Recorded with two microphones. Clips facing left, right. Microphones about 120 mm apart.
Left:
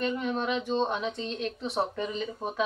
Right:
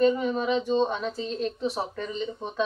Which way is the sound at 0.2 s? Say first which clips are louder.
Right 4 dB; centre (ahead or behind).